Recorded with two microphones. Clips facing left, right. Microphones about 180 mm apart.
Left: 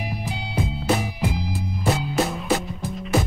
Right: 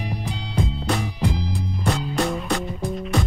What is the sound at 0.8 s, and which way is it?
Music, 10° left (ahead or behind).